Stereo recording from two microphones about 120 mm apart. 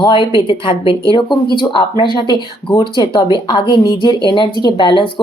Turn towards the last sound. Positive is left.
turn(degrees=40)  # may be behind; listen again after turning